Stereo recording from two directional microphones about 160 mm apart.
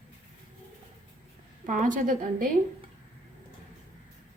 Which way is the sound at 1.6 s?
55° right (ahead or behind).